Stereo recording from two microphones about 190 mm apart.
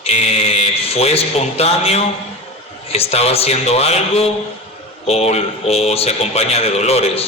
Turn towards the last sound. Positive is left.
turn(degrees=30)  # may be behind; listen again after turning